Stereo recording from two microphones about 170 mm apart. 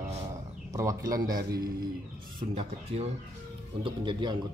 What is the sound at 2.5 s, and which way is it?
Speech, 40° right (ahead or behind).